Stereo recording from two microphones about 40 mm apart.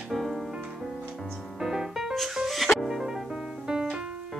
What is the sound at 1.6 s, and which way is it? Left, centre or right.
Music, centre.